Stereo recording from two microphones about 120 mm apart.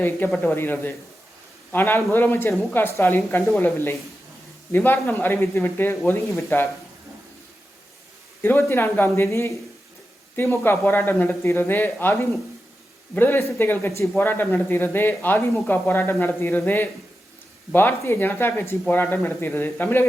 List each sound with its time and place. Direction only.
0.4 s a man's voice: 20° left (ahead or behind)
8.4 s a man's voice: 20° left (ahead or behind)